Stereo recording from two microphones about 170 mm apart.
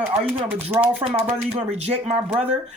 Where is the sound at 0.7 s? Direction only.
10° right (ahead or behind).